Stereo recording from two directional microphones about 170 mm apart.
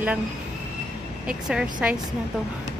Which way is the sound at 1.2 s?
5° right (ahead or behind).